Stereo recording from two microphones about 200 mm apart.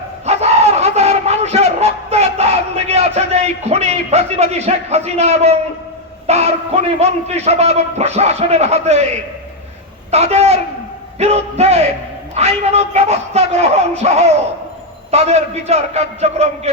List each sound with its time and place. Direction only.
0.3 s battle cry: 30° right (ahead or behind)
1.2 s a sound: 30° right (ahead or behind)
6.2 s a man's voice: 35° right (ahead or behind)
10.1 s a man's voice: 30° right (ahead or behind)